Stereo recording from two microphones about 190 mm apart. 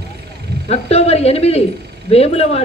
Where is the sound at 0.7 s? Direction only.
35° left (ahead or behind).